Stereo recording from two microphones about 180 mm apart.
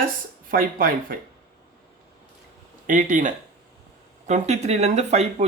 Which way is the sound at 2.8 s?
45° right (ahead or behind).